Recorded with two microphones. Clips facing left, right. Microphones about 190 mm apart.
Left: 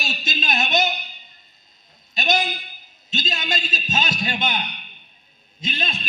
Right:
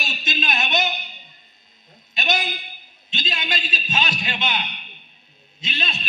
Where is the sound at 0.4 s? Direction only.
40° left (ahead or behind).